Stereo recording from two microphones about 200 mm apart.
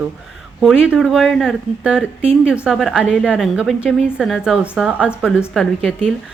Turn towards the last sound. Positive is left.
turn(degrees=-5)  # may be behind; listen again after turning